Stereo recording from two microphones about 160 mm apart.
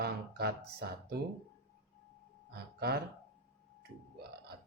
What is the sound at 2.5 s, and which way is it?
Speech, 80° right.